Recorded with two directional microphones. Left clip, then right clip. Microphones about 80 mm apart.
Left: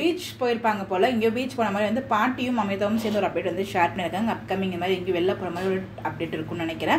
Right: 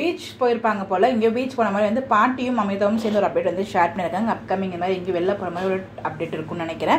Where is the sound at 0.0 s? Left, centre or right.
Right.